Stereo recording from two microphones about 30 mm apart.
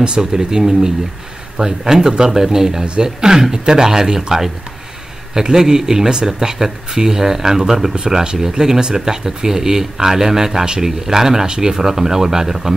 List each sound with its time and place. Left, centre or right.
0.0 s speech: right
0.3 s speech: centre
5.3 s speech: centre
10.6 s speech: right
11.1 s speech: centre
11.4 s speech: right
11.7 s speech: centre